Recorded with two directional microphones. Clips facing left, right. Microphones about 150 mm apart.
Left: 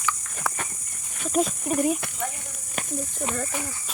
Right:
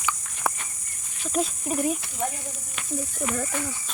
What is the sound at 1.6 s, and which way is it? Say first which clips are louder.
Speech: left 3 dB; centre (ahead or behind).